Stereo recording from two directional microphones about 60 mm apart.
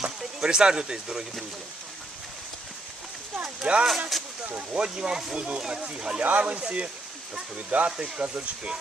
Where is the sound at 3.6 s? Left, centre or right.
Centre.